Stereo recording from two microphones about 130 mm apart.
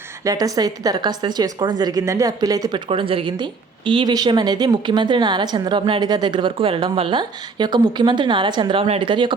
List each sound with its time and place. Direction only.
0.3 s a woman's voice: 30° right (ahead or behind)
2.7 s a woman's voice: 45° right (ahead or behind)